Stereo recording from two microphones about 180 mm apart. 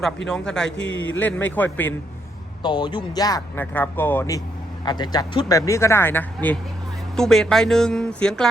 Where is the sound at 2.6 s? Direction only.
25° left (ahead or behind).